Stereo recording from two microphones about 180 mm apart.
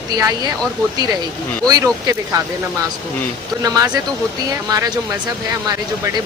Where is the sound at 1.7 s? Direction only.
20° right (ahead or behind).